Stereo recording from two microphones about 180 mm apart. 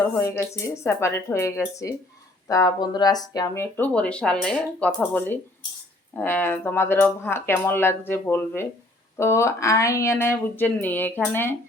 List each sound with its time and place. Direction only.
0.0 s speech: 15° left (ahead or behind)